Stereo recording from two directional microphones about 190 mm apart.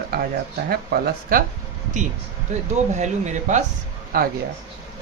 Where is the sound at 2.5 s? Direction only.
40° right (ahead or behind).